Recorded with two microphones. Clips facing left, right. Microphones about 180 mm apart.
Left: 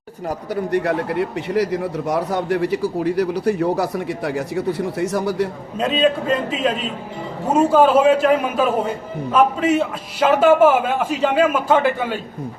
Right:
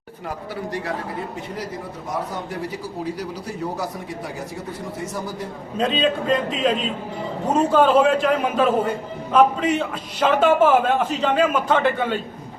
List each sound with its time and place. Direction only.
0.3 s a man's voice: 55° left (ahead or behind); by 5.5 s 75° left (ahead or behind)
5.7 s a man's voice: 5° left (ahead or behind)